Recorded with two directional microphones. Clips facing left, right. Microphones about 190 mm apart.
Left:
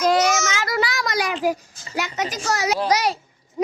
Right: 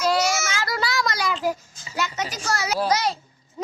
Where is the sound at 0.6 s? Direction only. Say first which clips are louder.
Left 2 dB; 15° left (ahead or behind).